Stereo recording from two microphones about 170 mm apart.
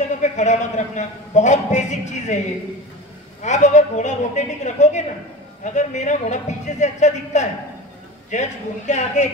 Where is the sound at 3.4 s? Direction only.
45° left (ahead or behind).